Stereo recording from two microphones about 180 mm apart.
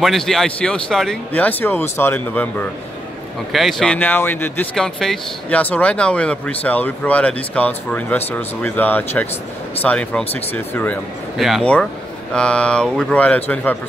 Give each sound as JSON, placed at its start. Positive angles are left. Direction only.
{"t": 0.0, "sound": "speech", "side_deg": 0}
{"t": 11.3, "sound": "speech", "side_deg": 0}